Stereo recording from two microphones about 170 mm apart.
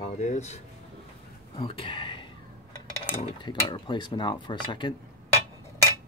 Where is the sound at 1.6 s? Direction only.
30° left (ahead or behind).